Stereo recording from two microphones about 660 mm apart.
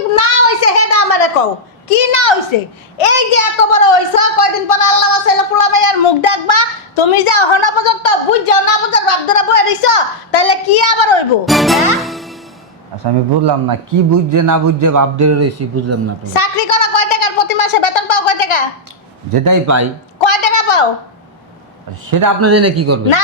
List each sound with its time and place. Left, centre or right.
0.2 s a sound: left
1.9 s a woman's voice: left
11.4 s music: centre
13.1 s a man's voice: right
16.3 s a woman's voice: left
19.3 s a man's voice: right
20.1 s a woman's voice: left
22.1 s a man's voice: right